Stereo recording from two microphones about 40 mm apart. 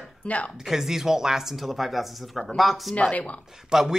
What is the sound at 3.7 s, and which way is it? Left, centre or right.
Speech, centre.